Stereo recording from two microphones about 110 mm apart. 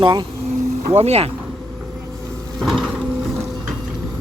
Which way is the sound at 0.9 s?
75° right (ahead or behind).